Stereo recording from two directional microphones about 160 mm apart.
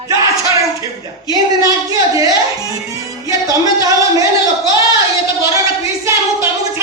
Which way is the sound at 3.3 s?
20° right (ahead or behind).